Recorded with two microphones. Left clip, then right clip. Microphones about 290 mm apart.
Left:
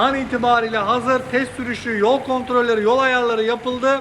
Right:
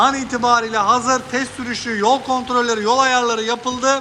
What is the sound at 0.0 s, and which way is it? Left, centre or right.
A man's voice, centre.